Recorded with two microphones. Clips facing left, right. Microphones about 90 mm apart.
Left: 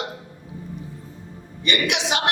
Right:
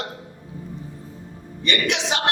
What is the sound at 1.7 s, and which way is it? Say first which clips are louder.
Speech: even; 20° left (ahead or behind).